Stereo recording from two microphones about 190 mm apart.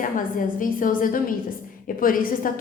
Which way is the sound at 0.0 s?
45° left (ahead or behind).